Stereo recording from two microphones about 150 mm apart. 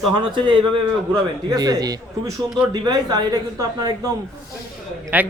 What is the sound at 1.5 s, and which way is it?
A man's voice, 25° right (ahead or behind).